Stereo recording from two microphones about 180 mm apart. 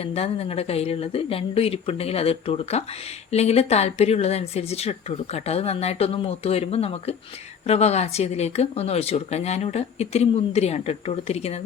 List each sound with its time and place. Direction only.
0.0 s a woman's voice: 35° left (ahead or behind)